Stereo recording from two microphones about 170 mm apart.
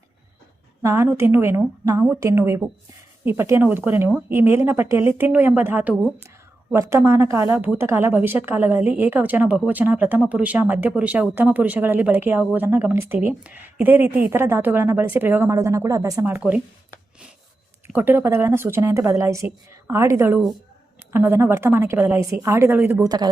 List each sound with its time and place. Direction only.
0.8 s a woman's voice: 15° right (ahead or behind)
17.8 s a woman's voice: 15° right (ahead or behind)